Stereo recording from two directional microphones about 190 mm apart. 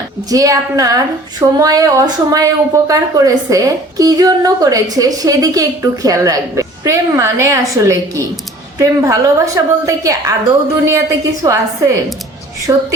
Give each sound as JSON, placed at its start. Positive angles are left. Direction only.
{"t": 0.3, "sound": "a woman's voice", "side_deg": -20}
{"t": 11.4, "sound": "a woman's voice", "side_deg": -15}